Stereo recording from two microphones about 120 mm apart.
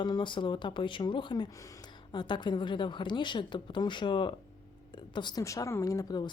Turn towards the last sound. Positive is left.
turn(degrees=30)  # may be behind; listen again after turning